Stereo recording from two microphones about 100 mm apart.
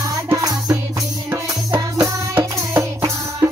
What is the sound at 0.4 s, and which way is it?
Music, 35° right (ahead or behind).